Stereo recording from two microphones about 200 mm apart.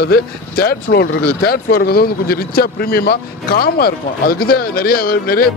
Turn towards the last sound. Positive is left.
turn(degrees=45)  # may be behind; listen again after turning